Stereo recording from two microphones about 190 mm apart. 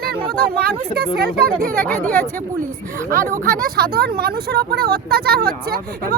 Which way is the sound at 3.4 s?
50° right (ahead or behind).